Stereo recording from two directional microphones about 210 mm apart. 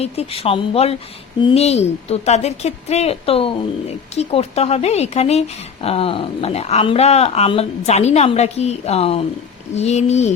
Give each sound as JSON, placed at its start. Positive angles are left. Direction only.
{"t": 0.0, "sound": "a woman's voice", "side_deg": 30}